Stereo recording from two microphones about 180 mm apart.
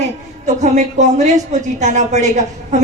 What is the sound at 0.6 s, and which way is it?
A woman's voice, 40° right (ahead or behind).